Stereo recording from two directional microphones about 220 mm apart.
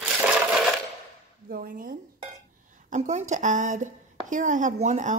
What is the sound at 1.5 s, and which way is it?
A woman's voice, 40° right (ahead or behind).